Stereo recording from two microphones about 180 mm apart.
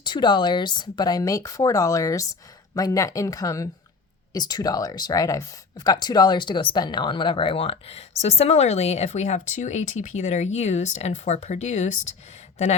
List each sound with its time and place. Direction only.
0.0 s speech: 25° left (ahead or behind)